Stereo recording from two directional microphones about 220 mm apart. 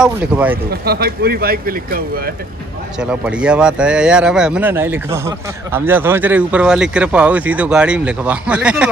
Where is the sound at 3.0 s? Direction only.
5° right (ahead or behind).